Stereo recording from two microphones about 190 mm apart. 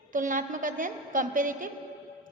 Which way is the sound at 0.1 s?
45° right (ahead or behind).